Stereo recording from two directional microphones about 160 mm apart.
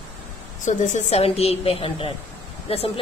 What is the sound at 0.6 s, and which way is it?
A woman's voice, 50° left (ahead or behind).